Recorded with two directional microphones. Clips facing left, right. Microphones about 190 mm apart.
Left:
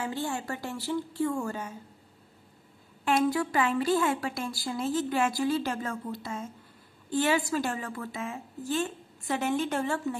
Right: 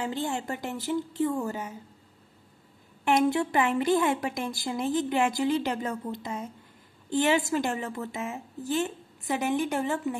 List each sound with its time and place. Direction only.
0.0 s a woman's voice: 20° right (ahead or behind)
3.1 s a woman's voice: 20° right (ahead or behind)